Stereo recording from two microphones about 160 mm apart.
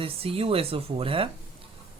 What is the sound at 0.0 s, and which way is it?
Speech, 35° right (ahead or behind).